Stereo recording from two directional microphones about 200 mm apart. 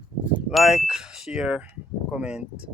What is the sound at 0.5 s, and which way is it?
Speech, centre (ahead or behind).